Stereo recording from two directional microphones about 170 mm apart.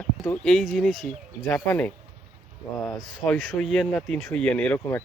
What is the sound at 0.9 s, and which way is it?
Speech, 50° left (ahead or behind).